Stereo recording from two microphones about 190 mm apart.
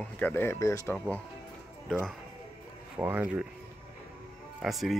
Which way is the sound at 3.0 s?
10° right (ahead or behind).